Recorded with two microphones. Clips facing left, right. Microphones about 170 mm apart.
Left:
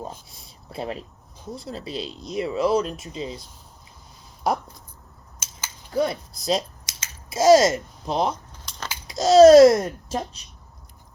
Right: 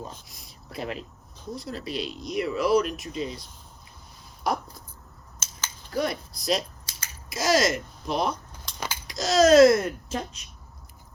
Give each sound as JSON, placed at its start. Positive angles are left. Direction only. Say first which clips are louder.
{"t": 0.3, "sound": "speech", "louder": "left 1 dB", "side_deg": 30}
{"t": 5.4, "sound": "scissors", "louder": "even", "side_deg": 10}
{"t": 5.9, "sound": "a child's voice", "louder": "left 4 dB", "side_deg": 30}